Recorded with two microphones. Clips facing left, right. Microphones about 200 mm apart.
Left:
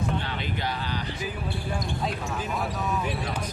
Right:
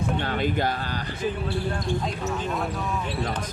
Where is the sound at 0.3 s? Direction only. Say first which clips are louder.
Right 7 dB; 50° right (ahead or behind).